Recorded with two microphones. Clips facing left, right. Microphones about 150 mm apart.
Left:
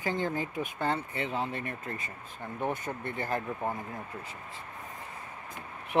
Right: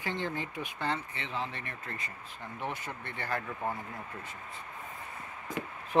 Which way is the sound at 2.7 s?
50° left (ahead or behind).